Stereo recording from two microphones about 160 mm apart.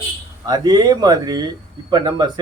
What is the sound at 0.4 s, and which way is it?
A man's voice, 25° right (ahead or behind).